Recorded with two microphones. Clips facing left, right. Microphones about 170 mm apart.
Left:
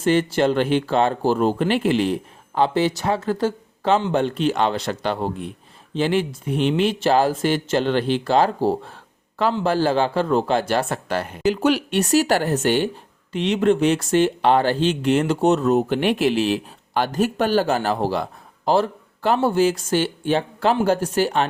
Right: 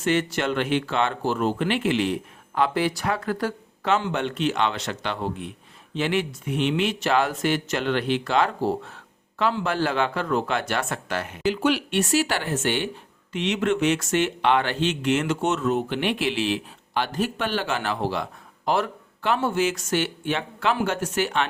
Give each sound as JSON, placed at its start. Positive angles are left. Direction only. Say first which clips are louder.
{"t": 0.0, "sound": "speech", "louder": "left 5 dB", "side_deg": 30}